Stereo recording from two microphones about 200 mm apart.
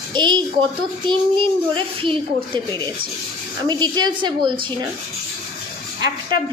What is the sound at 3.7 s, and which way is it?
A woman's voice, 20° right (ahead or behind).